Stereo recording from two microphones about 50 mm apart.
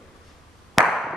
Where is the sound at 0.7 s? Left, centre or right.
Centre.